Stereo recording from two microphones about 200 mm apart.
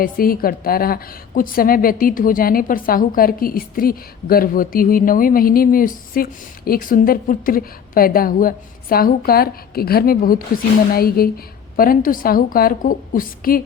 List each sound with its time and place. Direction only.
0.0 s a woman's voice: 45° left (ahead or behind)